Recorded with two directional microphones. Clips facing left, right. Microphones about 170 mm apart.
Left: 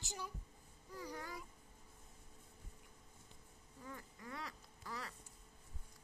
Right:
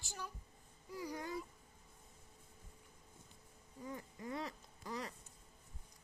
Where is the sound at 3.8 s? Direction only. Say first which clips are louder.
Right 6 dB; 20° right (ahead or behind).